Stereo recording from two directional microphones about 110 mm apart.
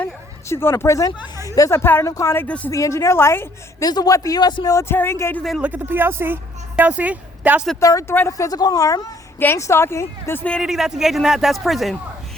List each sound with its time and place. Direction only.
0.4 s a woman's voice: 25° left (ahead or behind)
2.6 s a woman's voice: 25° left (ahead or behind)
3.8 s a man's voice: 35° left (ahead or behind)
5.4 s speech: centre (ahead or behind)
5.6 s a woman's voice: 15° right (ahead or behind)
7.8 s a woman's voice: 30° left (ahead or behind)
10.6 s speech: 5° right (ahead or behind)